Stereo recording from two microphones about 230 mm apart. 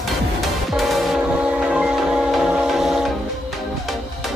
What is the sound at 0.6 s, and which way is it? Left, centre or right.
Music, centre.